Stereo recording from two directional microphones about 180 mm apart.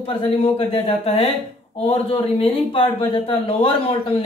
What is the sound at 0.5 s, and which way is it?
Speech, 35° left (ahead or behind).